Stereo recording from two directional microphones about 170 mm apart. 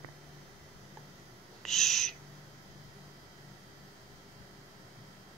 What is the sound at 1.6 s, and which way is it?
Owl, centre (ahead or behind).